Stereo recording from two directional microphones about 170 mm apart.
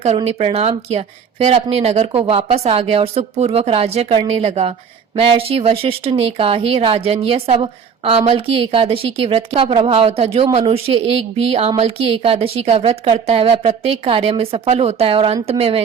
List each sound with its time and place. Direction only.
0.3 s speech: 35° right (ahead or behind)